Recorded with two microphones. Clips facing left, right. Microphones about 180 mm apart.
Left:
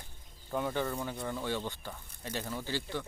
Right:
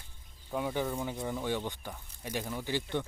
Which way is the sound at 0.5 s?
10° right (ahead or behind).